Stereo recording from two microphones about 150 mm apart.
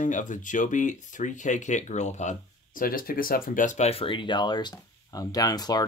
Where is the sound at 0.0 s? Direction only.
55° left (ahead or behind).